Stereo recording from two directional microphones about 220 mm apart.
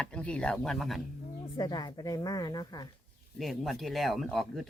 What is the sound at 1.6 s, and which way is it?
A woman's voice, 20° left (ahead or behind).